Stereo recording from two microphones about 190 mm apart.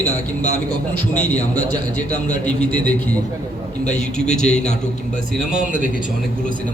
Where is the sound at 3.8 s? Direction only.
40° left (ahead or behind).